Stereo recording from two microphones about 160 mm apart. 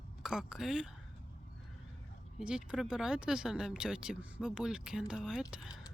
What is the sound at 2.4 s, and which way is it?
Speech, 5° right (ahead or behind).